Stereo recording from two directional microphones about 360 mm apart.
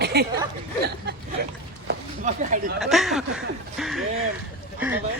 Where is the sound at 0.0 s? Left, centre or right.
Right.